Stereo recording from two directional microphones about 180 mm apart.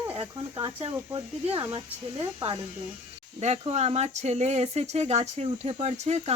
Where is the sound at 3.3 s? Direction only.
35° right (ahead or behind).